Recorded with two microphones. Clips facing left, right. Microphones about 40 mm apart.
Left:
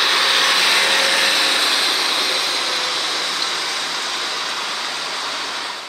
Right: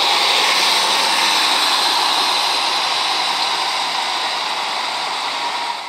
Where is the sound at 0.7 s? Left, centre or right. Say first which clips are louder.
Even; left.